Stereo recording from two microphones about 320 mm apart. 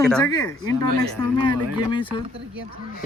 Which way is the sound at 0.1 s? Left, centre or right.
Centre.